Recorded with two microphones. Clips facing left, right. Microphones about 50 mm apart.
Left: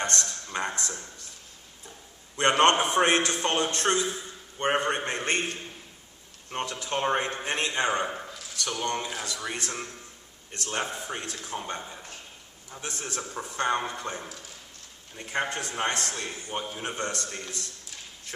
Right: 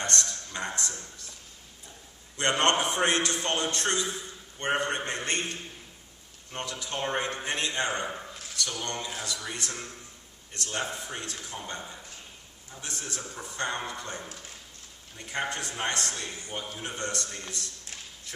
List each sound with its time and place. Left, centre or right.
0.0 s a sound: left
2.3 s a man's voice: left
12.8 s a man's voice: left